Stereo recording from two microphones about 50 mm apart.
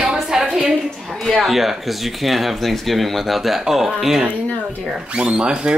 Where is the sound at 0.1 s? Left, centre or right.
Centre.